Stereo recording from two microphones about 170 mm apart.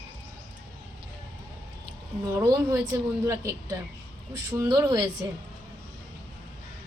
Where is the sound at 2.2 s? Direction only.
20° right (ahead or behind).